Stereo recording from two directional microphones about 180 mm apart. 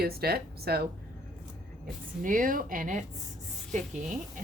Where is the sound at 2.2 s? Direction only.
50° right (ahead or behind).